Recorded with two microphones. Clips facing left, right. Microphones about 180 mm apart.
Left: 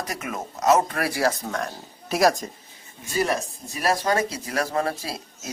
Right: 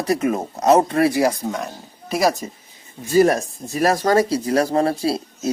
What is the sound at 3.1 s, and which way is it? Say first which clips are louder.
Speech: right 9 dB; 45° right (ahead or behind).